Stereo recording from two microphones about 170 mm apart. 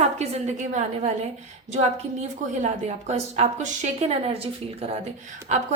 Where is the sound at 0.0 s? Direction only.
40° right (ahead or behind).